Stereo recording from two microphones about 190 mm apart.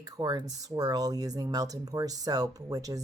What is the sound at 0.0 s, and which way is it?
Speech, 20° right (ahead or behind).